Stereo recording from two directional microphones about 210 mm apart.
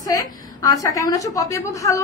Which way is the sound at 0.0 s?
15° left (ahead or behind).